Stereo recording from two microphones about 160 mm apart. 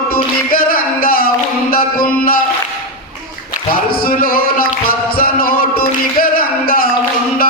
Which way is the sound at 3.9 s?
65° left (ahead or behind).